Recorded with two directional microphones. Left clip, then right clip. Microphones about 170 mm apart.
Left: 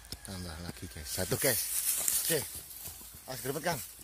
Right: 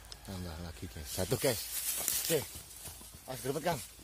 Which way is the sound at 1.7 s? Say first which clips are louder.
Left 3 dB; 30° right (ahead or behind).